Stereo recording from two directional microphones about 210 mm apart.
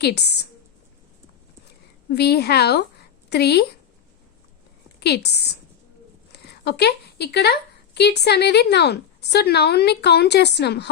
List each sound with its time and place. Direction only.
0.0 s a woman's voice: 50° left (ahead or behind)
2.1 s a woman's voice: 50° left (ahead or behind)
4.9 s a woman's voice: 50° left (ahead or behind)